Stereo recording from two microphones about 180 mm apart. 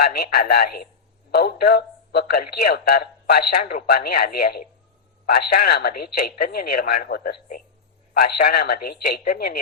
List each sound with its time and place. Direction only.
0.0 s a man's voice: 60° left (ahead or behind)